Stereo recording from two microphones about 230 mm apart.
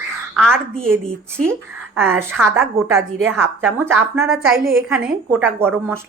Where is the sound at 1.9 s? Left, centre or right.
Centre.